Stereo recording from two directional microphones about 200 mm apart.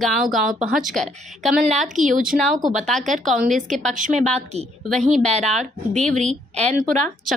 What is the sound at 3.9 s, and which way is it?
Speech, 40° right (ahead or behind).